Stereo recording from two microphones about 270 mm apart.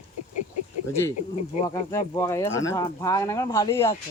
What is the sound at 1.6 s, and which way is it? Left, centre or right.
Speech, centre.